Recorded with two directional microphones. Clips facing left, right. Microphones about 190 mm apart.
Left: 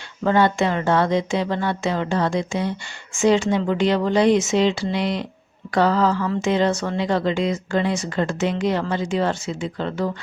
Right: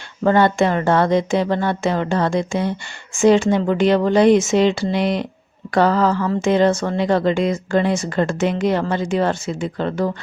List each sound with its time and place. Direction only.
0.3 s speech: 50° right (ahead or behind)